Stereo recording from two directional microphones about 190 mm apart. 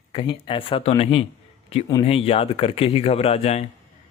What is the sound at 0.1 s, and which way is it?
Speech, 25° left (ahead or behind).